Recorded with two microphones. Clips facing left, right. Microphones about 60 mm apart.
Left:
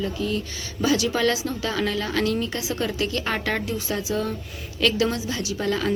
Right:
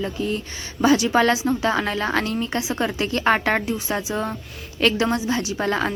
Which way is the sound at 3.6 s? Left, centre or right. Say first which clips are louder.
Right 2 dB; right.